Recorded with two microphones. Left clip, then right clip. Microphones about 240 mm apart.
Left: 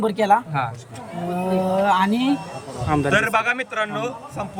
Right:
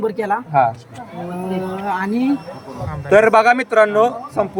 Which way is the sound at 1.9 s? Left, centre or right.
Centre.